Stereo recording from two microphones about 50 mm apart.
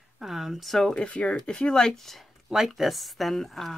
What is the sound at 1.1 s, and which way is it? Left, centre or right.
Speech, left.